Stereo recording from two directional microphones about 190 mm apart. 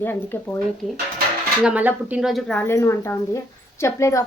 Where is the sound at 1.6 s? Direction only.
5° right (ahead or behind).